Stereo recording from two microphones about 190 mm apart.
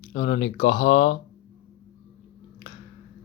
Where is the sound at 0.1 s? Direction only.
45° left (ahead or behind).